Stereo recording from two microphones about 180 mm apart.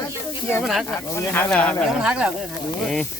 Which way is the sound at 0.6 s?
Centre (ahead or behind).